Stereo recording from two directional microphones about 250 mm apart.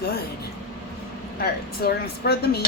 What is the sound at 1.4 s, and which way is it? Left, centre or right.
Speech, left.